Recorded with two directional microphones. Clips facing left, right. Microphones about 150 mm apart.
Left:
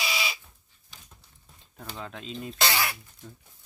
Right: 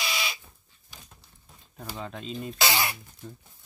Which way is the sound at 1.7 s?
5° right (ahead or behind).